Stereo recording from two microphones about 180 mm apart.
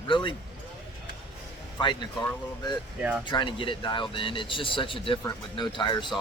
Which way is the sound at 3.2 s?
25° left (ahead or behind).